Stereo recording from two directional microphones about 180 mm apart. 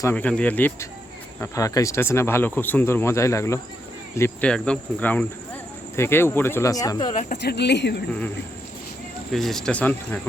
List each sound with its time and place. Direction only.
0.0 s speech: 10° left (ahead or behind)
7.4 s speech: 70° left (ahead or behind)
9.3 s speech: centre (ahead or behind)